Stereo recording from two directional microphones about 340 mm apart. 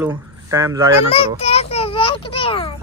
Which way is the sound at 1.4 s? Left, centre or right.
Centre.